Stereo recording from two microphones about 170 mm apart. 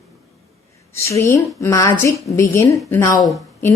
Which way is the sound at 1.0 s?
15° left (ahead or behind).